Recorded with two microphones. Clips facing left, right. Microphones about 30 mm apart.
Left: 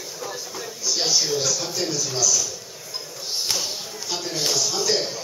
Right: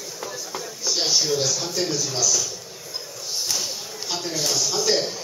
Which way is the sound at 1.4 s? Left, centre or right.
Centre.